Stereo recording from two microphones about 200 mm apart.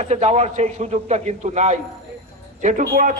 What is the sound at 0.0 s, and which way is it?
A man's voice, 35° right (ahead or behind).